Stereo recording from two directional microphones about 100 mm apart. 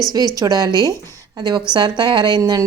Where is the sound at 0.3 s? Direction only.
40° right (ahead or behind).